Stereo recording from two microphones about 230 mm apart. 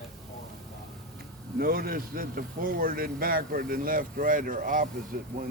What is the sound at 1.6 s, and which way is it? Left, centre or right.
A man's voice, right.